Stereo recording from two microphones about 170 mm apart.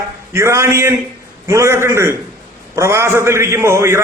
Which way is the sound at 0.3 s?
15° right (ahead or behind).